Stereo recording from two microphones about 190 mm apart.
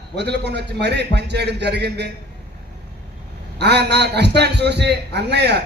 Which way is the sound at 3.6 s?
60° right (ahead or behind).